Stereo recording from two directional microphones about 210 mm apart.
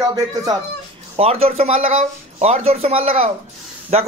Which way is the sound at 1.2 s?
30° right (ahead or behind).